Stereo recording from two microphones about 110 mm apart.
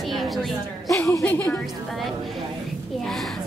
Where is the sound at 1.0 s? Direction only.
25° left (ahead or behind).